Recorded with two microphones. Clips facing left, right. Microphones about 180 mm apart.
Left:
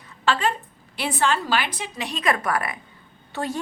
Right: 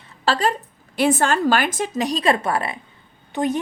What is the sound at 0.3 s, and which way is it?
A woman's voice, 40° right (ahead or behind).